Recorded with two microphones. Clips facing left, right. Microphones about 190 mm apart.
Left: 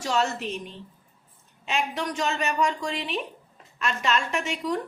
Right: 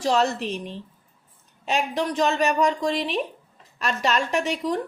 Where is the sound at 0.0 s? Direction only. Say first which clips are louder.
Right 4 dB; 35° right (ahead or behind).